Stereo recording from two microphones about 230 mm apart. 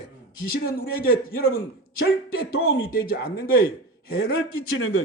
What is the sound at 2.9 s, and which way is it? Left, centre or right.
Speech, left.